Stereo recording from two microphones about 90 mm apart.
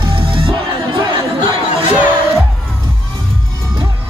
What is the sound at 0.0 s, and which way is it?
Music, 75° right (ahead or behind).